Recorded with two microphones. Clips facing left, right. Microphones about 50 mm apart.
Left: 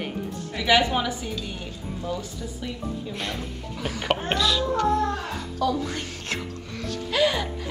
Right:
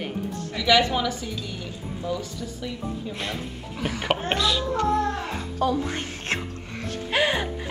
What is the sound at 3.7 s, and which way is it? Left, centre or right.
Speech, right.